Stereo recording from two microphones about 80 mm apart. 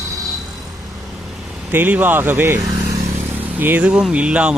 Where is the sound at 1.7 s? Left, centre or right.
Right.